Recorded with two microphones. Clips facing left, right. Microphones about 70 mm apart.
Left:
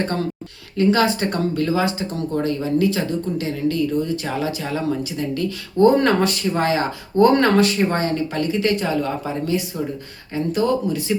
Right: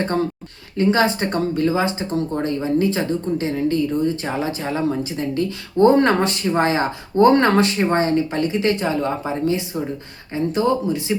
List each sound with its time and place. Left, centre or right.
0.0 s speech: right